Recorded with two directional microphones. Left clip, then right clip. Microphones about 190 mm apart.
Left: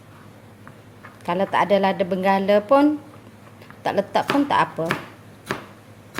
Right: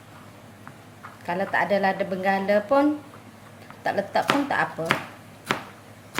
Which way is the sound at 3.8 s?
40° left (ahead or behind).